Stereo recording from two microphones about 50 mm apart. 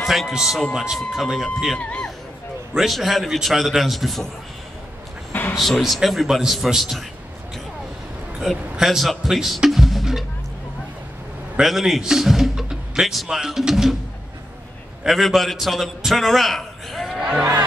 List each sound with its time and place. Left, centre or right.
0.0 s a sound: centre
0.3 s a man's voice: centre
1.8 s speech: left
2.7 s a man's voice: centre
5.6 s a man's voice: centre
8.4 s a man's voice: centre
11.6 s a man's voice: centre
15.0 s a man's voice: centre
16.1 s a sound: centre
17.2 s music: centre